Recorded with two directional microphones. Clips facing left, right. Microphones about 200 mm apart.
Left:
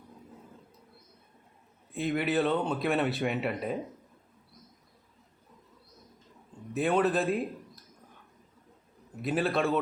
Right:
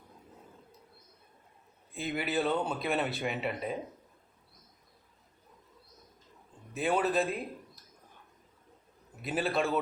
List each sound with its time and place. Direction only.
1.9 s speech: centre (ahead or behind)
6.7 s speech: centre (ahead or behind)
9.2 s speech: centre (ahead or behind)